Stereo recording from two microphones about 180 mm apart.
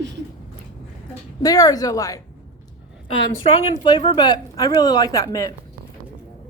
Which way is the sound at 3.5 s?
30° left (ahead or behind).